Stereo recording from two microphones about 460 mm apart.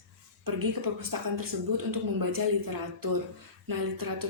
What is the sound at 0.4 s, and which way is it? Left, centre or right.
A woman's voice, right.